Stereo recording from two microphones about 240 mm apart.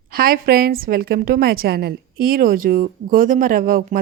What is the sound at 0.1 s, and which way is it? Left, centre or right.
A woman's voice, right.